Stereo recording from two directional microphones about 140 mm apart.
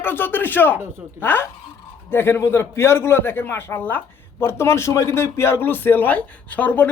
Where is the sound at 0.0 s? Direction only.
15° left (ahead or behind).